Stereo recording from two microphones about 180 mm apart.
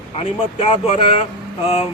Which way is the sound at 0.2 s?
30° left (ahead or behind).